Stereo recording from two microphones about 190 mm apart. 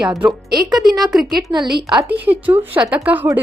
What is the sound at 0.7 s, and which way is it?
Speech, centre (ahead or behind).